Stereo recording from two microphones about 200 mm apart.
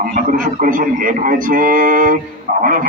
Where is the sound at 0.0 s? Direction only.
40° right (ahead or behind).